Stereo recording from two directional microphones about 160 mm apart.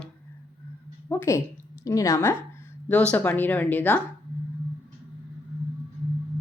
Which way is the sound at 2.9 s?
10° left (ahead or behind).